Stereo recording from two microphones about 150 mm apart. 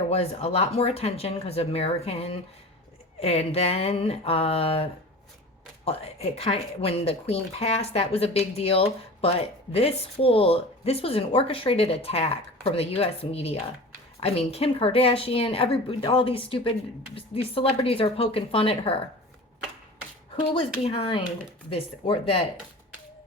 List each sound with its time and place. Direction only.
0.1 s speech: 45° left (ahead or behind)
20.3 s speech: 35° left (ahead or behind)